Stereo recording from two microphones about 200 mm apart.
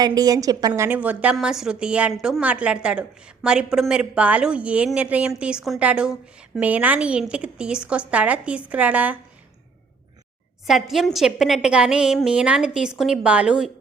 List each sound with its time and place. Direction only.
0.0 s a woman's voice: 20° right (ahead or behind)
10.7 s a woman's voice: centre (ahead or behind)